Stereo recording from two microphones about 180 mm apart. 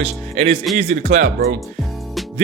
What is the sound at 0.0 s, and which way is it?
Speech, 35° right (ahead or behind).